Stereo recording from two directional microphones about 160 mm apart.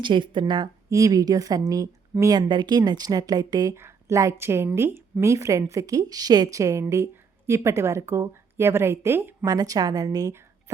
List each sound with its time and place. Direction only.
0.0 s speech: 30° right (ahead or behind)